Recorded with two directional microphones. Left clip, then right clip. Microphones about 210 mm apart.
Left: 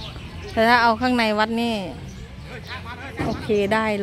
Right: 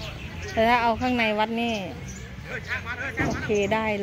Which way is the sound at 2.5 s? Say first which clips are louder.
Right 4 dB; 50° left (ahead or behind).